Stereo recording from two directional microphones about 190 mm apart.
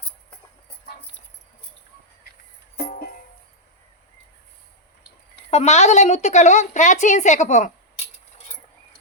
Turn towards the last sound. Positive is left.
turn(degrees=40)  # may be behind; listen again after turning